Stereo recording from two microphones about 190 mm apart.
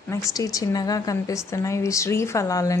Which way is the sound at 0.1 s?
15° left (ahead or behind).